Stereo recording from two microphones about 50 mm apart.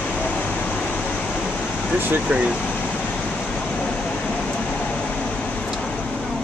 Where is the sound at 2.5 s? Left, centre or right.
Left.